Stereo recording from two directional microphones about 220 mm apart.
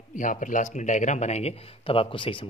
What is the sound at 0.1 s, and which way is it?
Speech, 35° left (ahead or behind).